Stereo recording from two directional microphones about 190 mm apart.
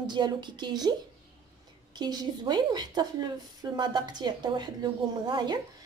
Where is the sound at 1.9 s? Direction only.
20° right (ahead or behind).